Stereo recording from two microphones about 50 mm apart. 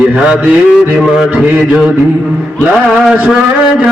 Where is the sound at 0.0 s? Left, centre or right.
Centre.